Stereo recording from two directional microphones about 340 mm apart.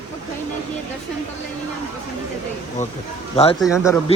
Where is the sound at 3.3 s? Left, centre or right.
Centre.